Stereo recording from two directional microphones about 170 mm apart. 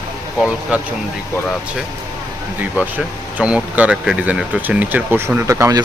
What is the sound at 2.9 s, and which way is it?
Speech, 10° right (ahead or behind).